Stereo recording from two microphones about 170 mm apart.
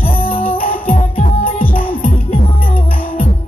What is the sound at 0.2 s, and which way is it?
Music, 60° left (ahead or behind).